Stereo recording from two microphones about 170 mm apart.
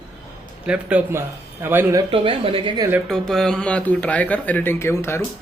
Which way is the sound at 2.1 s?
30° right (ahead or behind).